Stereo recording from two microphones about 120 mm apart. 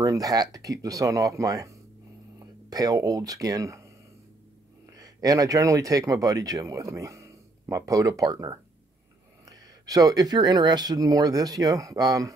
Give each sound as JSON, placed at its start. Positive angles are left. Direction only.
{"t": 0.0, "sound": "speech", "side_deg": -30}
{"t": 4.8, "sound": "speech", "side_deg": -30}